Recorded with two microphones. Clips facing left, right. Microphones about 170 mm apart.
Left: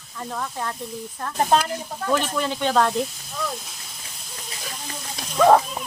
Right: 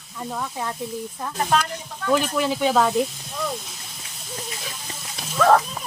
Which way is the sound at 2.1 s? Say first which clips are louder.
Right 3 dB; 5° right (ahead or behind).